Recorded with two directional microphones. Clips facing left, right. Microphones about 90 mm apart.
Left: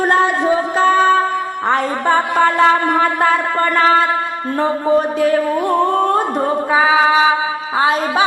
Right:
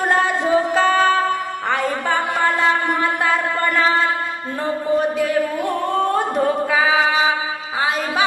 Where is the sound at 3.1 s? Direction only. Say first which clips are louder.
Left 4 dB; 40° left (ahead or behind).